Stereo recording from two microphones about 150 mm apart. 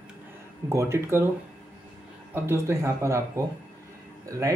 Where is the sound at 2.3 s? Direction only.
15° right (ahead or behind).